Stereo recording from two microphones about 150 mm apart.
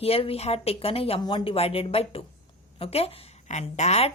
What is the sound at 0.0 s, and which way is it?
A woman's voice, 40° left (ahead or behind).